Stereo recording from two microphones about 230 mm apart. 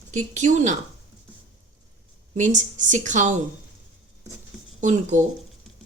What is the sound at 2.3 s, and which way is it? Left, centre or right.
A woman's voice, right.